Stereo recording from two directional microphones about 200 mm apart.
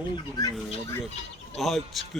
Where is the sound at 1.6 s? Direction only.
Centre (ahead or behind).